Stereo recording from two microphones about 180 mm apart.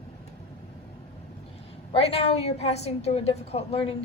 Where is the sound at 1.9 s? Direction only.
35° left (ahead or behind).